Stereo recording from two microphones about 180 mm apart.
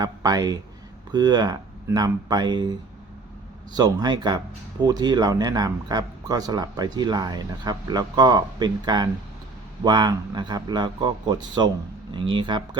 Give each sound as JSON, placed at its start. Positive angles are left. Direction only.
{"t": 0.0, "sound": "speech", "side_deg": -20}
{"t": 3.8, "sound": "speech", "side_deg": -25}